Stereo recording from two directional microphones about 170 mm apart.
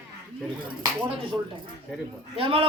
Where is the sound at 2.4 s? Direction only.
30° right (ahead or behind).